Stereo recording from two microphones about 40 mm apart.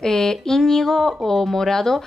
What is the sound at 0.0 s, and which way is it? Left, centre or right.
A woman's voice, centre.